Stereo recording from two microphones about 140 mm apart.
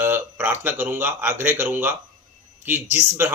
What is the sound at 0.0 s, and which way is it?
Speech, 15° right (ahead or behind).